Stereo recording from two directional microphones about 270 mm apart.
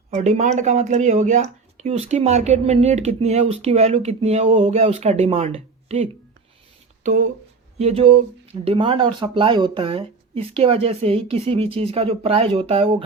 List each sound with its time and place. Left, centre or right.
0.1 s speech: right